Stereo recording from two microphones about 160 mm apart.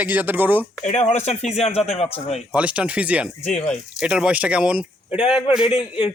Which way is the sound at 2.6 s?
5° right (ahead or behind).